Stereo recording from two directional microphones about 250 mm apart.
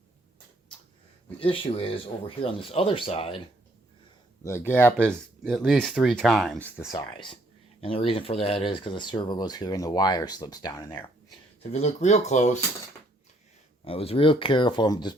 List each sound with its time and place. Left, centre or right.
1.4 s speech: left
4.4 s speech: centre
7.1 s speech: centre
11.6 s speech: left
13.8 s speech: left